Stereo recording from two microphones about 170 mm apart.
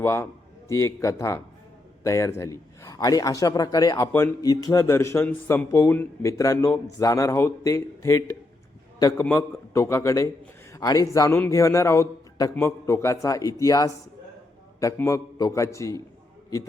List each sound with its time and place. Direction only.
0.0 s a man's voice: 15° left (ahead or behind)